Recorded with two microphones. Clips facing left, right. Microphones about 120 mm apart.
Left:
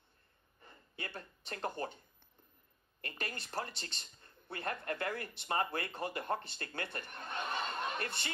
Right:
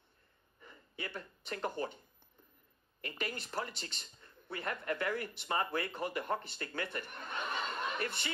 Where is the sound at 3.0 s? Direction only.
35° left (ahead or behind).